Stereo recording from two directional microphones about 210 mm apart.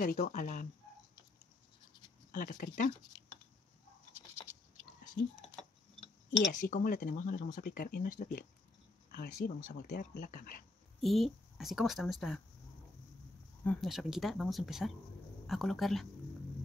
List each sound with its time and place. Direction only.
0.0 s speech: 40° left (ahead or behind)
2.3 s speech: 40° left (ahead or behind)
6.5 s speech: 40° left (ahead or behind)
11.0 s a woman's voice: centre (ahead or behind)
13.7 s a woman's voice: centre (ahead or behind)